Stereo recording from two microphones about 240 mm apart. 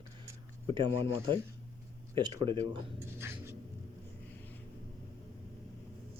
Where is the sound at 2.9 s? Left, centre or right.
Centre.